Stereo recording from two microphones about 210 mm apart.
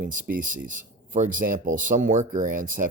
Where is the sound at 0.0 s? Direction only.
40° right (ahead or behind).